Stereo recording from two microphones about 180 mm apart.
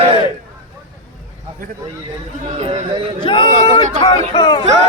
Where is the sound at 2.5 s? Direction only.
35° right (ahead or behind).